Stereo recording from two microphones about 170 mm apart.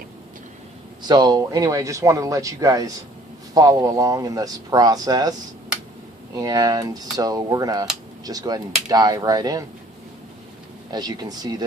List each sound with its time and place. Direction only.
1.0 s speech: 25° right (ahead or behind)
6.3 s speech: 20° right (ahead or behind)
10.9 s speech: 25° right (ahead or behind)